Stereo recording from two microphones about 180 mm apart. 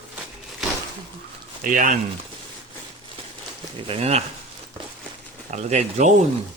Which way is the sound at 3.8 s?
35° right (ahead or behind).